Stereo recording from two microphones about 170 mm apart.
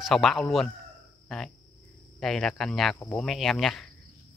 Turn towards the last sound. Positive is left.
turn(degrees=0)  # may be behind; listen again after turning